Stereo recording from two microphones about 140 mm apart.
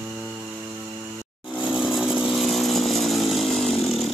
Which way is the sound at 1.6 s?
5° right (ahead or behind).